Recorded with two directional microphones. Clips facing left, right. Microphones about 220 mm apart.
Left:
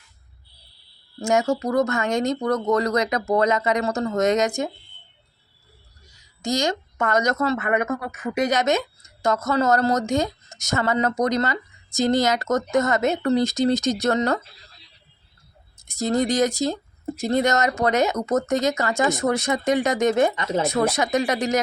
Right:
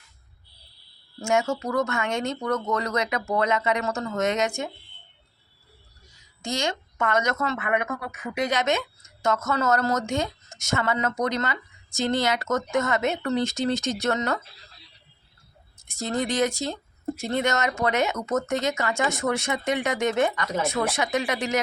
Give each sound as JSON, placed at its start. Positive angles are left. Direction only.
{"t": 1.2, "sound": "a woman's voice", "side_deg": 35}
{"t": 6.4, "sound": "a woman's voice", "side_deg": 40}
{"t": 15.9, "sound": "a woman's voice", "side_deg": 40}
{"t": 20.3, "sound": "speech", "side_deg": 25}
{"t": 20.6, "sound": "a woman's voice", "side_deg": 40}